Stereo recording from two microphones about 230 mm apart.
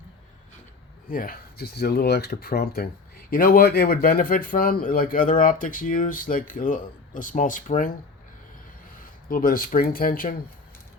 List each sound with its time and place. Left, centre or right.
1.1 s speech: left
9.3 s speech: left